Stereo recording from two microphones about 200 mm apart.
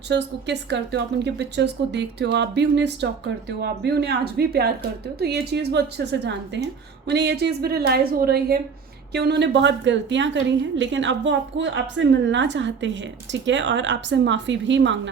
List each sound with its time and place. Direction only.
0.1 s a woman's voice: 60° right (ahead or behind)